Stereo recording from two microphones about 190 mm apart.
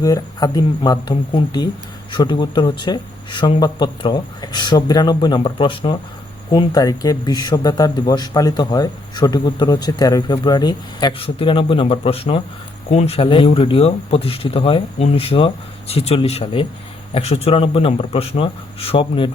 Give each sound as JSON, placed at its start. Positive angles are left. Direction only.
{"t": 0.0, "sound": "speech", "side_deg": 20}